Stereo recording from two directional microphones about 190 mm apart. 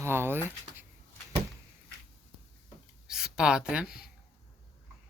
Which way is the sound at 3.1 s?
5° right (ahead or behind).